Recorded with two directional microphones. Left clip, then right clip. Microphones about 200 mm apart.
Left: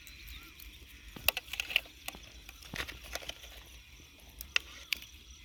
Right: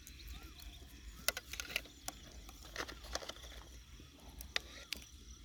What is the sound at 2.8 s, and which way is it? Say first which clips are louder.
Patter: left 3 dB; 5° right (ahead or behind).